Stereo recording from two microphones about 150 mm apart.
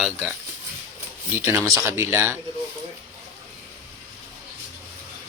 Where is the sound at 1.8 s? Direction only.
20° right (ahead or behind).